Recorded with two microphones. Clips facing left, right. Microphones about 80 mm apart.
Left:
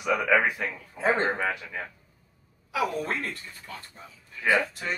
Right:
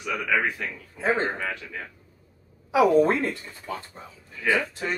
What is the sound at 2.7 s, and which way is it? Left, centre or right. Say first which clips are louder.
A woman's voice: right 10 dB; right.